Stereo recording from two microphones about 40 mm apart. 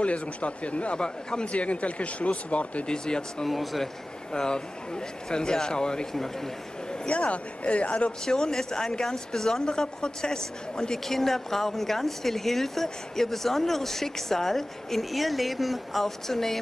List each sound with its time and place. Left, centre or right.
0.0 s speech: left
0.9 s a man's voice: left
1.5 s speech: left
2.9 s a man's voice: left
3.4 s speech: centre
4.3 s a man's voice: centre
7.1 s speech: left
8.3 s speech: centre